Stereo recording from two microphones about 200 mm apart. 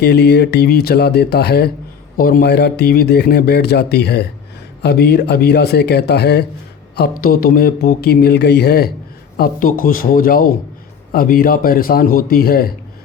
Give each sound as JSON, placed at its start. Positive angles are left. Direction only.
{"t": 0.0, "sound": "speech", "side_deg": 55}